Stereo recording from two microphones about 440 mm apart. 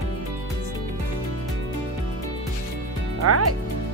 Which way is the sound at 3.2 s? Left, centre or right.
Right.